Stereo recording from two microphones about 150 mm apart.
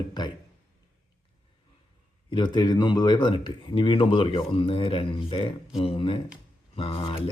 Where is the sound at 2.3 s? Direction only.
30° left (ahead or behind).